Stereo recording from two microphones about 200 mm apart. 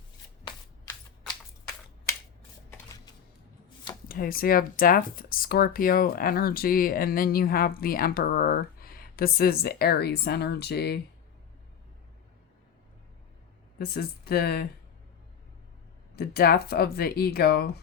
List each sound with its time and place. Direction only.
4.1 s speech: 45° left (ahead or behind)
13.7 s speech: 50° left (ahead or behind)
16.1 s speech: 50° left (ahead or behind)